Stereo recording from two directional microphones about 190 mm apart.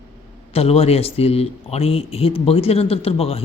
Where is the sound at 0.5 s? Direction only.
30° left (ahead or behind).